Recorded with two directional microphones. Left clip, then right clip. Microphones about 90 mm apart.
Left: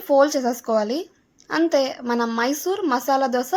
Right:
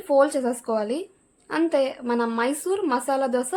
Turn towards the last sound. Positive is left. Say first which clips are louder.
# left 3 dB
turn(degrees=30)  # may be behind; listen again after turning